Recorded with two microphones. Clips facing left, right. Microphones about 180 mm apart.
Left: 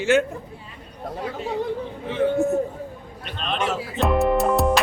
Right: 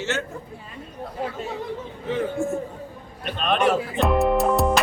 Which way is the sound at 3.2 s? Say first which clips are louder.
Right 5 dB; 55° right (ahead or behind).